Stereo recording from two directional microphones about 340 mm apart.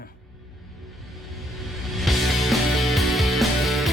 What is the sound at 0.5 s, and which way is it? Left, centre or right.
Music, centre.